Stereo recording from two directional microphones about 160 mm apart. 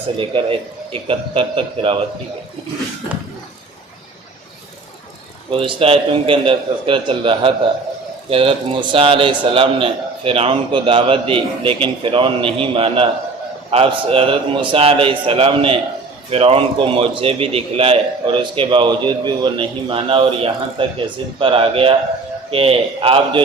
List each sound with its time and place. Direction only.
1.0 s a man's voice: 35° right (ahead or behind)
5.5 s a man's voice: 35° right (ahead or behind)